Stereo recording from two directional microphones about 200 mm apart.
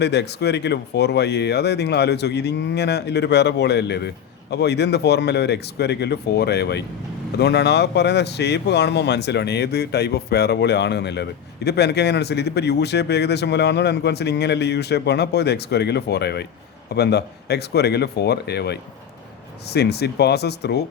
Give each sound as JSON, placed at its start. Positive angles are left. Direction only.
{"t": 0.0, "sound": "speech", "side_deg": 55}